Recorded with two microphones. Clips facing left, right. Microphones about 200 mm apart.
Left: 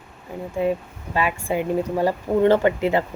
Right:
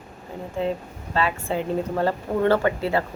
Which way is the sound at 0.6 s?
10° left (ahead or behind).